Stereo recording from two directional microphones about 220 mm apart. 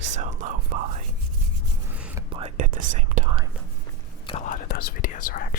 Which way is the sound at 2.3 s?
25° right (ahead or behind).